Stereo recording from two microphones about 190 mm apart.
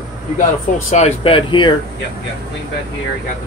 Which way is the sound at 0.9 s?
30° left (ahead or behind).